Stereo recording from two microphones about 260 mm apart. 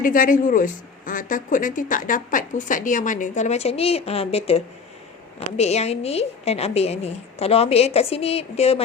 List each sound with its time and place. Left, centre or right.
0.0 s speech: left